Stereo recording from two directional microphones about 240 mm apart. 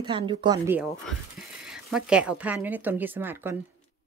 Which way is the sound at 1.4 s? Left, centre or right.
Centre.